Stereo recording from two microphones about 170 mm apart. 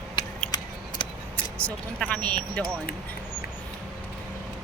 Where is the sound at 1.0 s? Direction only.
30° left (ahead or behind).